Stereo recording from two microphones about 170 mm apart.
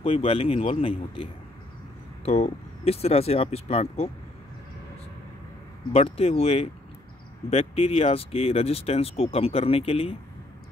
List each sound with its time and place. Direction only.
0.0 s speech: 35° left (ahead or behind)
5.9 s speech: 35° left (ahead or behind)